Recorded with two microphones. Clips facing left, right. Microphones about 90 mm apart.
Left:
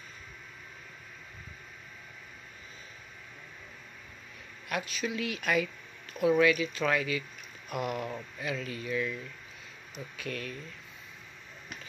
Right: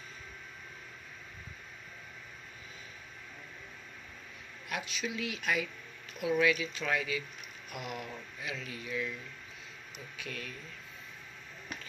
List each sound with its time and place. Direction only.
4.6 s speech: 50° left (ahead or behind)
7.7 s speech: 45° left (ahead or behind)